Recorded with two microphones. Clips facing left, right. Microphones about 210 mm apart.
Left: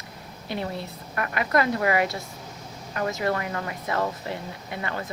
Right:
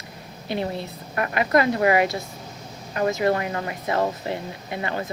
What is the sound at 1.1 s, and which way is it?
Speech, 25° right (ahead or behind).